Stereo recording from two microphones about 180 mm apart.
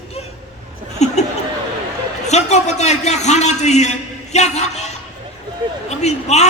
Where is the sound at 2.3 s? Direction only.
40° left (ahead or behind).